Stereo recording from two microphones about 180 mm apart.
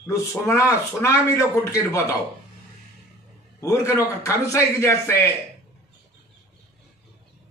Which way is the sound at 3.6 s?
15° left (ahead or behind).